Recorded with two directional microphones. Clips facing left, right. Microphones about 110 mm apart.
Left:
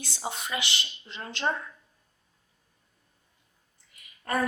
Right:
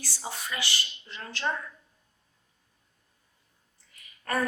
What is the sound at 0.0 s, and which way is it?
A woman's voice, 20° left (ahead or behind).